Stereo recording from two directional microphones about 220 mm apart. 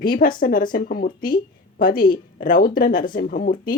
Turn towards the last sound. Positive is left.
turn(degrees=40)  # may be behind; listen again after turning